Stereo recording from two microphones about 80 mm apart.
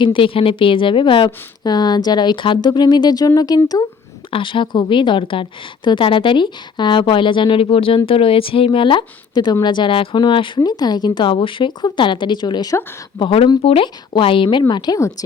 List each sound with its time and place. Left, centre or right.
0.0 s a woman's voice: left
4.4 s a woman's voice: left
9.6 s a woman's voice: left
10.6 s a woman's voice: left
13.1 s a woman's voice: left
14.7 s speech: left